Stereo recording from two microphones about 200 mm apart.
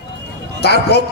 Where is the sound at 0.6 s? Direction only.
55° left (ahead or behind).